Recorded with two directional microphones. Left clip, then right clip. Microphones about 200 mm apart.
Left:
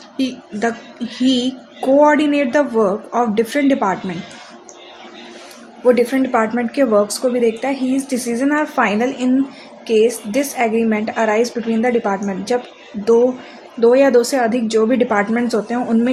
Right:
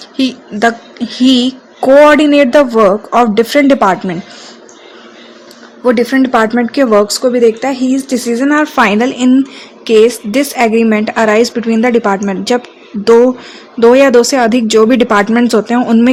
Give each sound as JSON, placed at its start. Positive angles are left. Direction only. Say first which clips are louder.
{"t": 0.2, "sound": "a woman's voice", "louder": "right 8 dB", "side_deg": -45}
{"t": 5.8, "sound": "a woman's voice", "louder": "right 4 dB", "side_deg": -45}
{"t": 13.7, "sound": "a woman's voice", "louder": "right 6 dB", "side_deg": -45}